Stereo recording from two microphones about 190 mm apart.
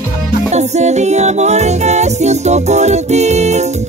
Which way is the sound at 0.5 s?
35° right (ahead or behind).